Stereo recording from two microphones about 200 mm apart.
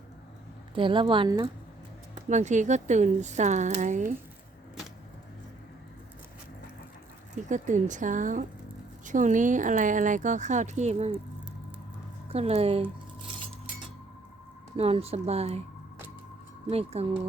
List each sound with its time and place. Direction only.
0.7 s a woman's voice: 25° right (ahead or behind)
2.3 s speech: 35° right (ahead or behind)
7.4 s speech: 40° right (ahead or behind)
12.3 s speech: 30° right (ahead or behind)
14.8 s speech: 30° right (ahead or behind)
16.6 s speech: 30° right (ahead or behind)